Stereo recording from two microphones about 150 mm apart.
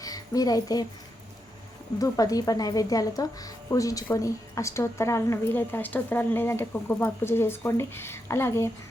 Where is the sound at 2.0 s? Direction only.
25° left (ahead or behind).